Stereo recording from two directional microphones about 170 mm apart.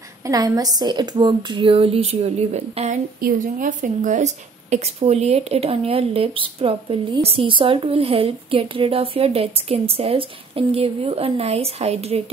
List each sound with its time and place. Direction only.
0.2 s a woman's voice: 20° right (ahead or behind); by 3.0 s 40° right (ahead or behind)
3.2 s a woman's voice: 55° right (ahead or behind); by 12.2 s 40° right (ahead or behind)